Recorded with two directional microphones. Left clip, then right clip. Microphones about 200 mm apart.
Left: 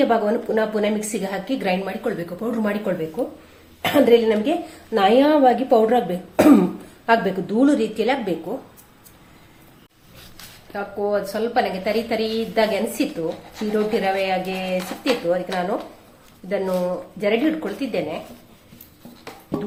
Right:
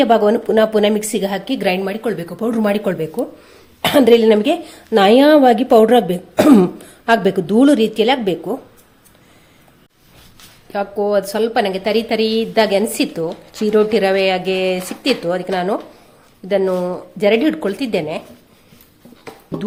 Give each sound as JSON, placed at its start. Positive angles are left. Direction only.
{"t": 0.0, "sound": "a woman's voice", "side_deg": -50}
{"t": 10.7, "sound": "a woman's voice", "side_deg": -50}